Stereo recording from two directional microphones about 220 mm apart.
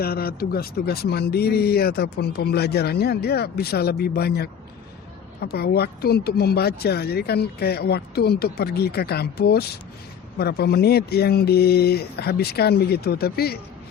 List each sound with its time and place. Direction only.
0.0 s speech: 45° left (ahead or behind)